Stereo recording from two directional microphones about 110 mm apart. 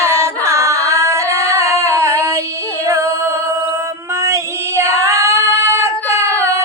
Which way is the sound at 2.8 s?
25° right (ahead or behind).